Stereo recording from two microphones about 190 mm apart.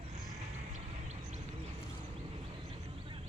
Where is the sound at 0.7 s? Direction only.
35° right (ahead or behind).